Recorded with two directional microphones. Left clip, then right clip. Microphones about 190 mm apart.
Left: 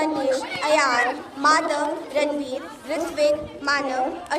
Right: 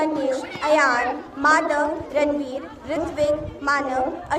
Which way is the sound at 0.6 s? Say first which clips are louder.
Right 2 dB; 10° right (ahead or behind).